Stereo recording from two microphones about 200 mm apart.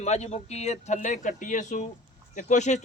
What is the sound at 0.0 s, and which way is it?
Speech, 35° left (ahead or behind).